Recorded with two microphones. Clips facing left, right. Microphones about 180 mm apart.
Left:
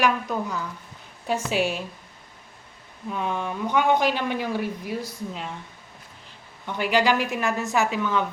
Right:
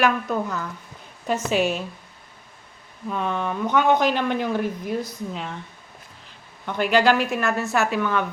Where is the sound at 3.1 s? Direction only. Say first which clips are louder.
Right 2 dB; 10° left (ahead or behind).